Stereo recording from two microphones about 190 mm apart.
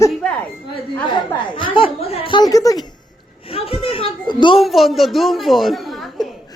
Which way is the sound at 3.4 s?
30° left (ahead or behind).